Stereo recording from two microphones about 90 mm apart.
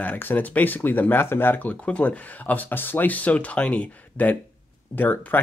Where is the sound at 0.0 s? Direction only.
20° left (ahead or behind).